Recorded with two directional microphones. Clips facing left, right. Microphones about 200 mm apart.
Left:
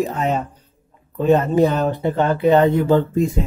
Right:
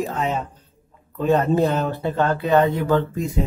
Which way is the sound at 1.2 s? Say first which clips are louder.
Left 3 dB; 20° left (ahead or behind).